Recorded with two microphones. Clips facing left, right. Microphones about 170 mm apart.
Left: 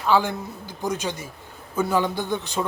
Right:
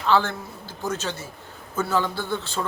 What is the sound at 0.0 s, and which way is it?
A man's voice, 10° left (ahead or behind).